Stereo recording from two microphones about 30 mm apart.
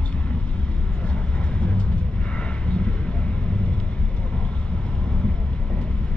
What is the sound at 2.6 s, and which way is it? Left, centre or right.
Vehicle, left.